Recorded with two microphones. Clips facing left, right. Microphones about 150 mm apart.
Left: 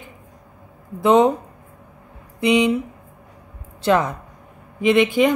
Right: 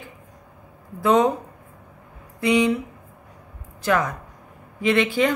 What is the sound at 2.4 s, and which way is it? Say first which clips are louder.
Speech: left 2 dB; 20° left (ahead or behind).